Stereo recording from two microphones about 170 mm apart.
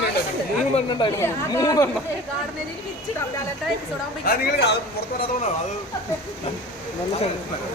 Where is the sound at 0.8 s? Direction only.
30° left (ahead or behind).